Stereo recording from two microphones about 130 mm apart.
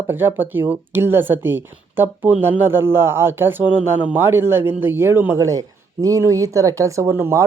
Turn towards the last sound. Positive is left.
turn(degrees=-20)  # may be behind; listen again after turning